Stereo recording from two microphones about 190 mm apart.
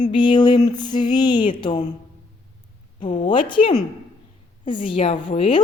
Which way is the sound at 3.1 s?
25° left (ahead or behind).